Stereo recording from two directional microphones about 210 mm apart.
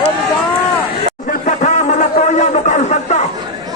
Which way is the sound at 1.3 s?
35° left (ahead or behind).